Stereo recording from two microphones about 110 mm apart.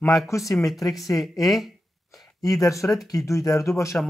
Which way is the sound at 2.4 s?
30° left (ahead or behind).